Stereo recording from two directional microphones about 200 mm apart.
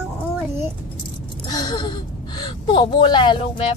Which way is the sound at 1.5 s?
20° left (ahead or behind).